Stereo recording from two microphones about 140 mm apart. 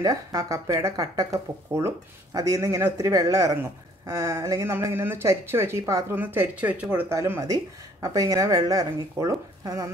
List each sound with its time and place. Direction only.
0.0 s speech: 25° right (ahead or behind)